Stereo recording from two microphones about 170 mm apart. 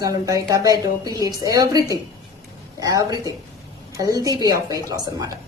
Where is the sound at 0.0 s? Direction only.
20° right (ahead or behind).